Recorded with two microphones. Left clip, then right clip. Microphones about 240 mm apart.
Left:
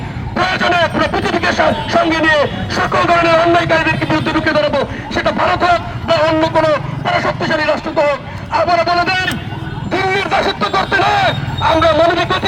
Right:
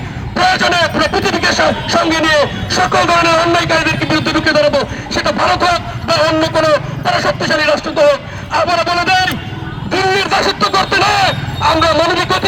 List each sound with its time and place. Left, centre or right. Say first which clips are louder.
0.3 s speech: right 2 dB; right